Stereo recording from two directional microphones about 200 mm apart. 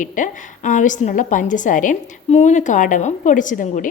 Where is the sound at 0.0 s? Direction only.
40° left (ahead or behind).